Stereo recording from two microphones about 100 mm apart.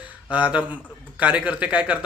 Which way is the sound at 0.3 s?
15° right (ahead or behind).